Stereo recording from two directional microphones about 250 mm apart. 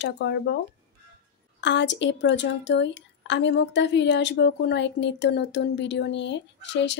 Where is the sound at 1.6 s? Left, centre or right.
Left.